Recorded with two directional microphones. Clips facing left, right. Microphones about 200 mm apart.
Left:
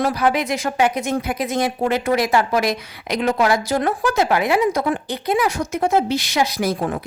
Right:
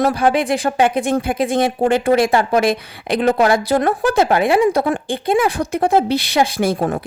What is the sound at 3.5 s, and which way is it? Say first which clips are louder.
Speech: right 4 dB; 55° right (ahead or behind).